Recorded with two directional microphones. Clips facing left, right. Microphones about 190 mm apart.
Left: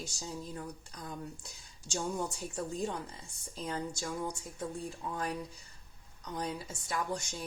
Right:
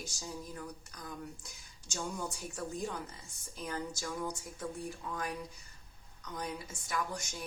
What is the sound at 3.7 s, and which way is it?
Speech, 20° left (ahead or behind).